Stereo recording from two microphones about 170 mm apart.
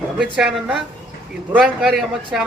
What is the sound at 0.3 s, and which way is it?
Speech, 5° right (ahead or behind).